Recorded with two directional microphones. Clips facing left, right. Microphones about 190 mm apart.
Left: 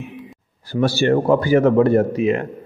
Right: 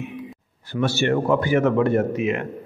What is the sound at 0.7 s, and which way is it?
A man's voice, 35° left (ahead or behind).